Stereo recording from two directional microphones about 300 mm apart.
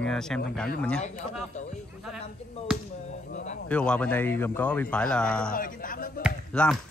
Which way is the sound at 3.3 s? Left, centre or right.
Left.